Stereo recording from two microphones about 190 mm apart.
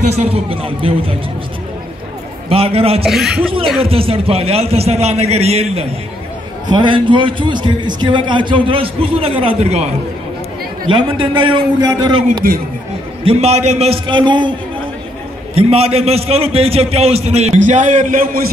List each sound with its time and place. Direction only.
0.0 s a man's voice: 35° right (ahead or behind)
2.5 s a man's voice: 30° right (ahead or behind)
3.1 s speech: centre (ahead or behind)
3.8 s a man's voice: 30° right (ahead or behind)
10.9 s a man's voice: 25° right (ahead or behind)
12.4 s speech: 50° right (ahead or behind)
13.2 s a man's voice: 30° right (ahead or behind)
15.5 s a man's voice: 30° right (ahead or behind)